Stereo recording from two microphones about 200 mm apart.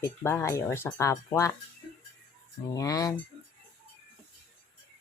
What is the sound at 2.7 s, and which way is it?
Speech, 15° left (ahead or behind).